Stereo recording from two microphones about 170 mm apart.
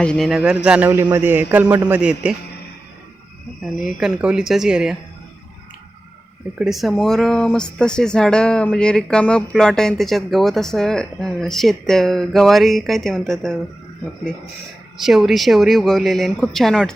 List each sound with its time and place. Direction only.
0.0 s a man's voice: 5° left (ahead or behind)
3.6 s speech: centre (ahead or behind)
6.6 s speech: centre (ahead or behind)
15.0 s speech: centre (ahead or behind)